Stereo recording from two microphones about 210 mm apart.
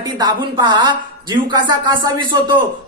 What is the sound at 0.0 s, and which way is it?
Speech, 20° right (ahead or behind).